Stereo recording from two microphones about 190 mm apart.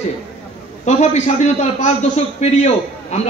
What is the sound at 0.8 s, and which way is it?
A man's voice, 35° left (ahead or behind).